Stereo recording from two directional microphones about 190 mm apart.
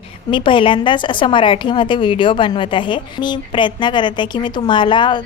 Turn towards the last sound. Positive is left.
turn(degrees=25)  # may be behind; listen again after turning